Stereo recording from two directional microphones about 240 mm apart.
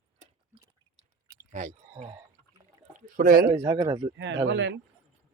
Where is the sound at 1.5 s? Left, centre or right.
Right.